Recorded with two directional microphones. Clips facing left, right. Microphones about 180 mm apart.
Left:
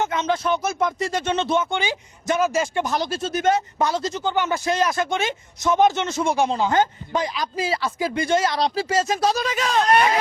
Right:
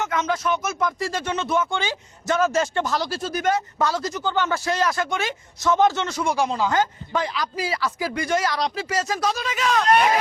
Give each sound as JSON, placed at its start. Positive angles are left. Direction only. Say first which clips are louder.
{"t": 0.0, "sound": "speech", "louder": "left 2 dB", "side_deg": 25}
{"t": 9.3, "sound": "speech", "louder": "left 1 dB", "side_deg": 35}